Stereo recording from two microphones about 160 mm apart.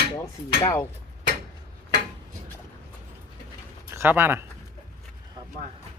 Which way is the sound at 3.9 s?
15° right (ahead or behind).